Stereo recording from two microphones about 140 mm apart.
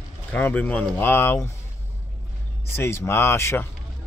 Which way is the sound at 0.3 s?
10° left (ahead or behind).